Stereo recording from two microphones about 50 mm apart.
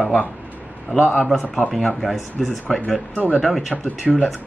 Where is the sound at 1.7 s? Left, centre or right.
Centre.